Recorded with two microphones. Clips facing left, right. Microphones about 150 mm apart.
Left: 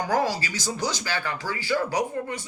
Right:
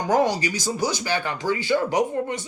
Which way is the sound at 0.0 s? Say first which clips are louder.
Right 4 dB; 20° right (ahead or behind).